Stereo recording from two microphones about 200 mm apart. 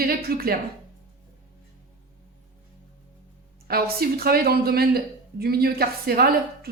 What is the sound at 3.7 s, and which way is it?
Speech, 50° right (ahead or behind).